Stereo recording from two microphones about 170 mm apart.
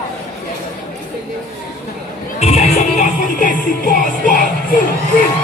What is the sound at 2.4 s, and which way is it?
Music, 40° left (ahead or behind).